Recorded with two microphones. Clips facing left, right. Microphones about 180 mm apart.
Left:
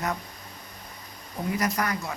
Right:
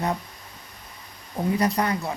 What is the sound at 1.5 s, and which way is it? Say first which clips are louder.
Speech: right 4 dB; 30° right (ahead or behind).